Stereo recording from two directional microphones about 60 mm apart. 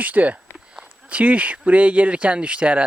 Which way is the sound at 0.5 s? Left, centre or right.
Centre.